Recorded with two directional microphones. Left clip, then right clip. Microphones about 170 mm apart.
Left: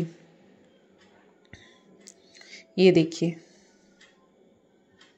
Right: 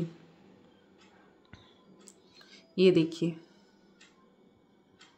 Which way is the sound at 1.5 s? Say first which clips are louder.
Left 6 dB; 10° left (ahead or behind).